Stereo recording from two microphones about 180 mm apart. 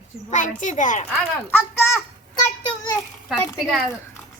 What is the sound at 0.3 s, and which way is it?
Speech, 45° left (ahead or behind).